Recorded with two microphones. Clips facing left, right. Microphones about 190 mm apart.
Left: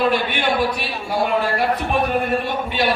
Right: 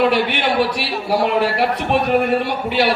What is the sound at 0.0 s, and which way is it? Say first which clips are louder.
A man's voice: right 3 dB; 75° right (ahead or behind).